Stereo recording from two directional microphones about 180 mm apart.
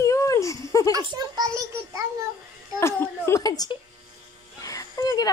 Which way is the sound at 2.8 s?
15° left (ahead or behind).